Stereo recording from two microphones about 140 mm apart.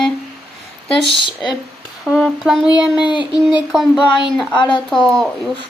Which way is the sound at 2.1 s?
Centre (ahead or behind).